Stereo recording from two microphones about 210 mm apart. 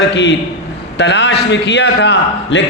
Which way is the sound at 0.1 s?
55° left (ahead or behind).